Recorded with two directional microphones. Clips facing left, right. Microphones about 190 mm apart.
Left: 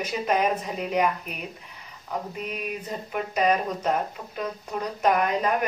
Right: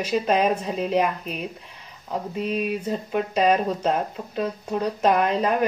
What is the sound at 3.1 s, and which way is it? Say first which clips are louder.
Speech: right 3 dB; 30° right (ahead or behind).